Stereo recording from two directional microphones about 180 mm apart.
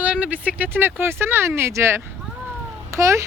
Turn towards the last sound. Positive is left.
turn(degrees=-15)  # may be behind; listen again after turning